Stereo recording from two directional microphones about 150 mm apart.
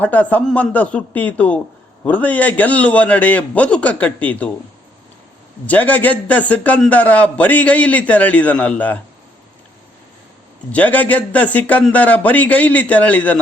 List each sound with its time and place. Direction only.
0.0 s a man's voice: 10° left (ahead or behind)
5.6 s a man's voice: 10° left (ahead or behind)
10.7 s a man's voice: 10° left (ahead or behind)